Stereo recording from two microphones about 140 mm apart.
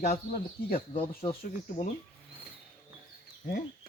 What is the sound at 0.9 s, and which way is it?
Speech, 45° left (ahead or behind).